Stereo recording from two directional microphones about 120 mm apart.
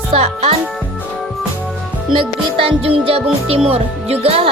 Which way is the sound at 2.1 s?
50° right (ahead or behind).